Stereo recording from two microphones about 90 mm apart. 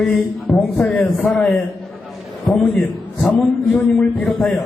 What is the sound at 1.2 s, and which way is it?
Speech, 5° left (ahead or behind).